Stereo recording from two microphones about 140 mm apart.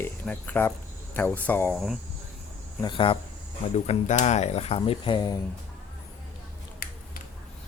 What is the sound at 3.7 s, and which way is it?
Speech, 50° left (ahead or behind).